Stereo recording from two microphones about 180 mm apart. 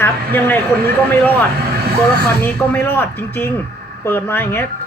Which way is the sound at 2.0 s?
10° left (ahead or behind).